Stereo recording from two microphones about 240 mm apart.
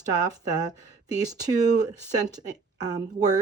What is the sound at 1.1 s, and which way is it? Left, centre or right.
A woman's voice, centre.